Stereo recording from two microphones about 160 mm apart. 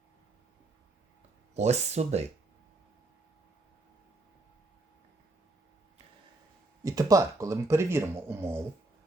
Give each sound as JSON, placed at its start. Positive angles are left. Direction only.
{"t": 1.5, "sound": "speech", "side_deg": -45}
{"t": 6.8, "sound": "speech", "side_deg": -20}